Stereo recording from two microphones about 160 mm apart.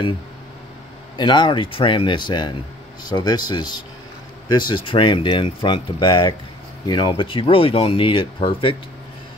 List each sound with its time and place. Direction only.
1.1 s speech: 30° left (ahead or behind)